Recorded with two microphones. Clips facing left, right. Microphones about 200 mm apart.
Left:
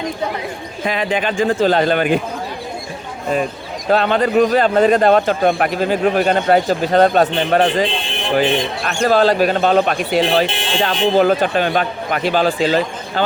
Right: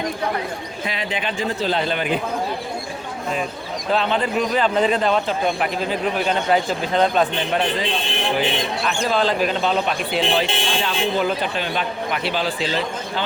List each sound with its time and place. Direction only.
0.9 s a man's voice: 50° left (ahead or behind)
3.9 s a man's voice: 50° left (ahead or behind)